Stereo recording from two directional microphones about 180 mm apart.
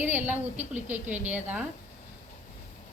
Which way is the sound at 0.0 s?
10° right (ahead or behind).